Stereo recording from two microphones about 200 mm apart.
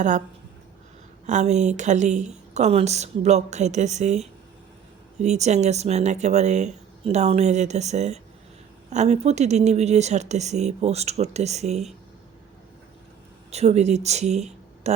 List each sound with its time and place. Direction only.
1.3 s speech: 35° right (ahead or behind)
13.5 s speech: 35° right (ahead or behind)